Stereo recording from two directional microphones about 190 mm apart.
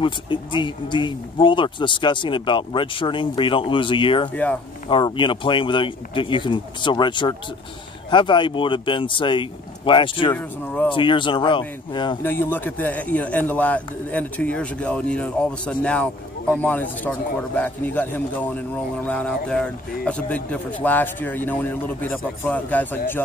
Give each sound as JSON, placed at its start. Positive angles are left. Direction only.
{"t": 0.0, "sound": "speech", "side_deg": 25}
{"t": 4.3, "sound": "speech", "side_deg": 10}
{"t": 4.8, "sound": "speech", "side_deg": 25}
{"t": 10.3, "sound": "speech", "side_deg": 10}
{"t": 10.9, "sound": "speech", "side_deg": 25}
{"t": 12.2, "sound": "speech", "side_deg": 10}